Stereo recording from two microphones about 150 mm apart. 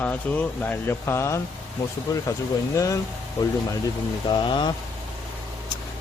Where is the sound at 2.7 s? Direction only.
20° left (ahead or behind).